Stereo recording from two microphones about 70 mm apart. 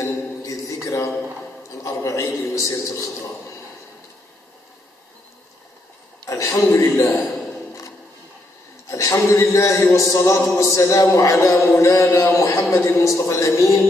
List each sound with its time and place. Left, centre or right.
0.0 s a sound: left
6.2 s a man's voice: left
8.8 s a man's voice: left